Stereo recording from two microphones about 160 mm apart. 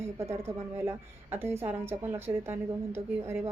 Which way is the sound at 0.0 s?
15° right (ahead or behind).